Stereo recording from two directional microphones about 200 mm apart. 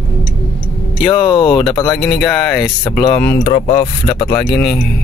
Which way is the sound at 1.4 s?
25° left (ahead or behind).